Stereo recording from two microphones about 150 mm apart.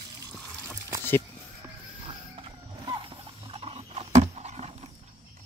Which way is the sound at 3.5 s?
40° right (ahead or behind).